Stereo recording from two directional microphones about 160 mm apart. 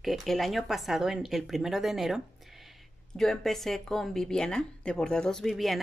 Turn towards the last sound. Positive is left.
turn(degrees=0)  # may be behind; listen again after turning